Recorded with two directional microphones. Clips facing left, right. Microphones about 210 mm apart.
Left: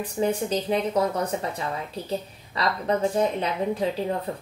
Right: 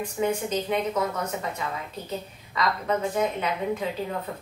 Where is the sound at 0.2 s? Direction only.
40° left (ahead or behind).